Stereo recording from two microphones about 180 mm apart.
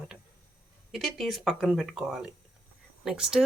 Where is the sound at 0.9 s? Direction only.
Centre (ahead or behind).